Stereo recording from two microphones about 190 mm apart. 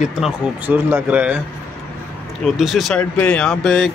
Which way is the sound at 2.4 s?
Centre (ahead or behind).